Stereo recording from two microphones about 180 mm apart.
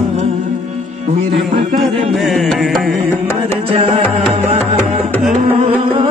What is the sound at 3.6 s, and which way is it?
Music, 35° right (ahead or behind).